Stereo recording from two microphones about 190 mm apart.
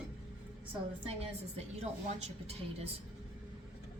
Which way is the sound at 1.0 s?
30° right (ahead or behind).